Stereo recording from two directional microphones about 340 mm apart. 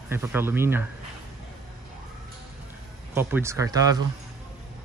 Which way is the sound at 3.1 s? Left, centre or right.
Centre.